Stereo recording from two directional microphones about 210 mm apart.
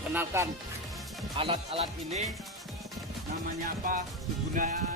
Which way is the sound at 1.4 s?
25° right (ahead or behind).